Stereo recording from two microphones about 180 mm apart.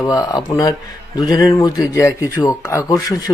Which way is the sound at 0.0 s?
20° left (ahead or behind).